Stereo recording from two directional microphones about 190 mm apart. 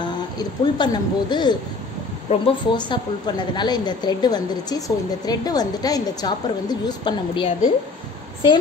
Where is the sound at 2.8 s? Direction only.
25° left (ahead or behind).